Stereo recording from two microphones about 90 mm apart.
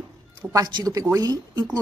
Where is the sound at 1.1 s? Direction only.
45° right (ahead or behind).